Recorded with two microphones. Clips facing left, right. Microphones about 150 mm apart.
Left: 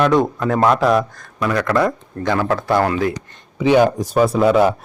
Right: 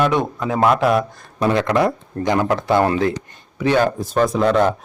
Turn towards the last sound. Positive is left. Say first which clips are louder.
# left 2 dB
turn(degrees=5)  # may be behind; listen again after turning